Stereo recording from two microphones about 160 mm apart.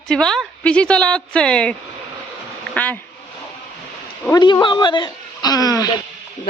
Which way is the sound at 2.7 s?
10° left (ahead or behind).